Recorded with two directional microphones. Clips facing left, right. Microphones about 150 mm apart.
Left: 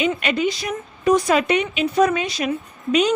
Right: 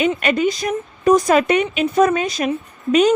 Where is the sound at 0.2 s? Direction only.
45° right (ahead or behind).